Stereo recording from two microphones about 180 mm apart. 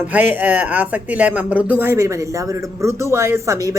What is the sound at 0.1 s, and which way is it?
Speech, 10° right (ahead or behind).